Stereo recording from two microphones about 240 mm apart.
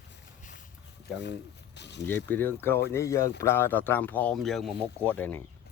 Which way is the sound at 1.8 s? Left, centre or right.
Left.